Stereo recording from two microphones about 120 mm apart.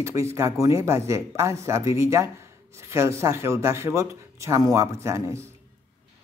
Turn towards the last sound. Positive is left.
turn(degrees=-25)  # may be behind; listen again after turning